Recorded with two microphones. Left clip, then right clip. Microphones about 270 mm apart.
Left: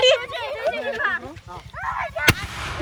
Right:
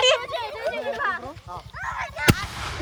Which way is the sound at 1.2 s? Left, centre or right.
Centre.